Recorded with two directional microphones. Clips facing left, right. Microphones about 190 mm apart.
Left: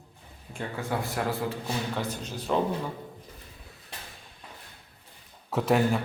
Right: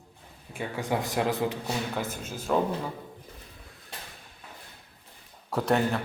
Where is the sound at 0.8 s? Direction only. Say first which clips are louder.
Right 3 dB; 20° right (ahead or behind).